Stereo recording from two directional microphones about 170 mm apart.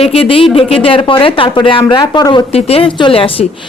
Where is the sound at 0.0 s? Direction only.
35° left (ahead or behind).